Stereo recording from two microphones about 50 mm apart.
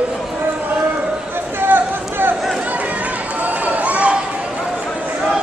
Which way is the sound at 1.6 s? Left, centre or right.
Right.